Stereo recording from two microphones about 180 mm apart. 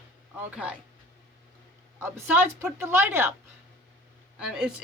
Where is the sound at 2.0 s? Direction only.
15° right (ahead or behind).